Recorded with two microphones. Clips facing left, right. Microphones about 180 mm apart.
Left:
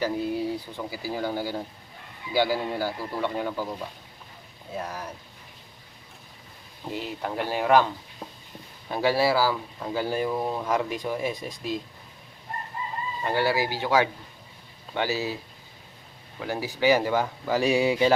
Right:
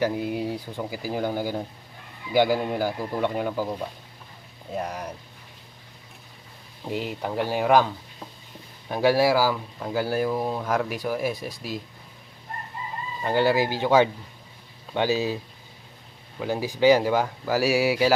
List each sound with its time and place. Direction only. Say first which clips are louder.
0.0 s speech: right 1 dB; 15° right (ahead or behind)
4.8 s speech: right 3 dB; 15° right (ahead or behind)
6.9 s speech: right 3 dB; 15° right (ahead or behind)
8.9 s speech: right 3 dB; 15° right (ahead or behind)
13.2 s speech: right 4 dB; 15° right (ahead or behind)
16.4 s speech: right 4 dB; 15° right (ahead or behind)